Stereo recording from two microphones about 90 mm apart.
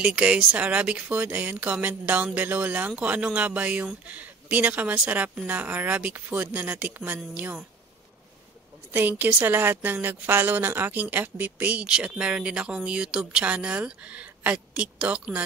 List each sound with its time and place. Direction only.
0.0 s a woman's voice: 15° right (ahead or behind)
8.9 s a woman's voice: 20° right (ahead or behind)